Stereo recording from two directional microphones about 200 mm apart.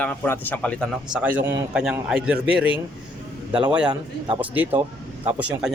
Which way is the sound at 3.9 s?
25° right (ahead or behind).